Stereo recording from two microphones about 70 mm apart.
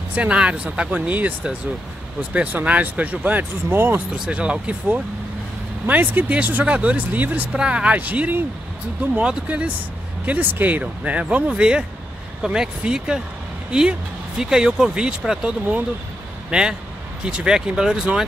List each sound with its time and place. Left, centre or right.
0.1 s speech: centre
4.1 s speech: centre
7.5 s speech: centre